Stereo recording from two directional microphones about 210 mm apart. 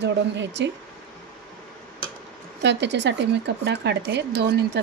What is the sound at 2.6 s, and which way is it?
Speech, 55° right (ahead or behind).